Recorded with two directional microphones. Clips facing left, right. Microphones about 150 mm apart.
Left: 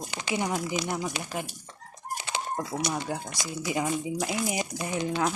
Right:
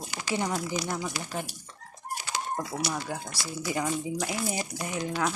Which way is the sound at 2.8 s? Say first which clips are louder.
Left 2 dB; 20° left (ahead or behind).